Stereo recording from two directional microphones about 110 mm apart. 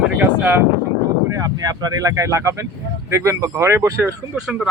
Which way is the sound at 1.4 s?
35° right (ahead or behind).